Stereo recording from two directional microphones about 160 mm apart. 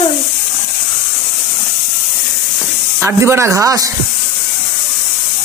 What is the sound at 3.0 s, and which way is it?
Speech, 15° right (ahead or behind).